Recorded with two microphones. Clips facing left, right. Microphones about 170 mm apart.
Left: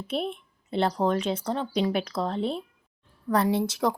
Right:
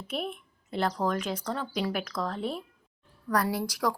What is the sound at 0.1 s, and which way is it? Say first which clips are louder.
A woman's voice: left 4 dB; 30° left (ahead or behind).